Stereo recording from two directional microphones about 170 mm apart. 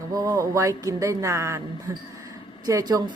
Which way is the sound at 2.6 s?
20° right (ahead or behind).